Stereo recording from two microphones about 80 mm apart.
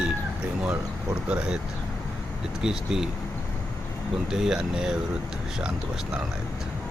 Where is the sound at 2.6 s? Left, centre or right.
Centre.